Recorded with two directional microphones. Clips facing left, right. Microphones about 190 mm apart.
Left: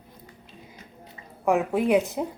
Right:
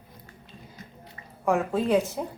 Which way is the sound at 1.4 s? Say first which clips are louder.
Left 2 dB; 15° left (ahead or behind).